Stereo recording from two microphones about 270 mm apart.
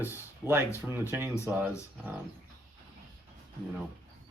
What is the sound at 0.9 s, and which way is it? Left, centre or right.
Speech, centre.